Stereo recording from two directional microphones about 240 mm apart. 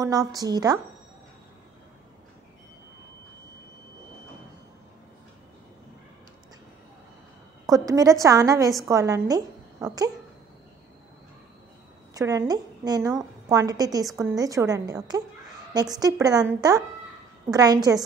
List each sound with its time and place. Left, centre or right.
0.0 s a woman's voice: centre
7.6 s a woman's voice: centre
12.1 s a woman's voice: centre